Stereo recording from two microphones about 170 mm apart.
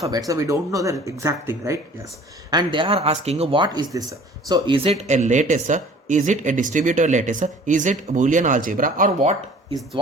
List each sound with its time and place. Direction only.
0.0 s speech: 20° right (ahead or behind); by 9.3 s 50° right (ahead or behind)